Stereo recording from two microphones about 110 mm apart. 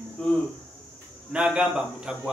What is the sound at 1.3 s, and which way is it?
Speech, 5° right (ahead or behind).